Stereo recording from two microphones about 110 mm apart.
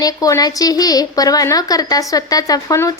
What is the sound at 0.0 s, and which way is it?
A woman's voice, 35° left (ahead or behind).